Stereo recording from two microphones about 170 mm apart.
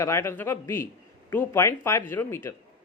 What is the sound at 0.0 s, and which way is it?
Speech, 15° left (ahead or behind).